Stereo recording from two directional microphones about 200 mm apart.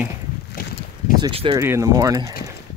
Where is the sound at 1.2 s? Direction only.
25° right (ahead or behind).